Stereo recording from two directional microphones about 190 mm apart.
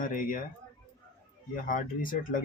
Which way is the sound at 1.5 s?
45° left (ahead or behind).